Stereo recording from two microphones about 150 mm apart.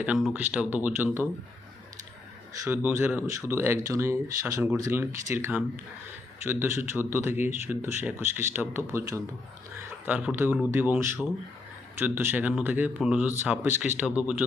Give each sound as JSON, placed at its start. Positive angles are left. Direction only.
{"t": 0.0, "sound": "speech", "side_deg": -10}
{"t": 2.6, "sound": "speech", "side_deg": -15}